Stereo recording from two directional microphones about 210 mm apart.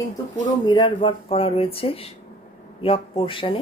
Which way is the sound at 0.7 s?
20° left (ahead or behind).